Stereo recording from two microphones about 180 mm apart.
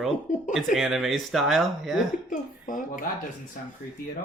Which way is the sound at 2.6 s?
50° left (ahead or behind).